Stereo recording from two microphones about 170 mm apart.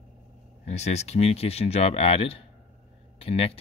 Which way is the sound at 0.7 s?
40° left (ahead or behind).